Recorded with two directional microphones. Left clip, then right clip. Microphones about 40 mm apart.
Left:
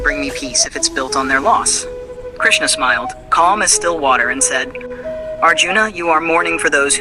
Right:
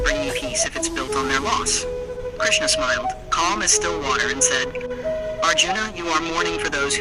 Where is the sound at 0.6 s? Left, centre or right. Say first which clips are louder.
Left 8 dB; left.